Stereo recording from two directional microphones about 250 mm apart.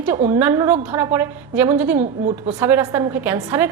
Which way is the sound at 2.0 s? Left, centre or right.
Right.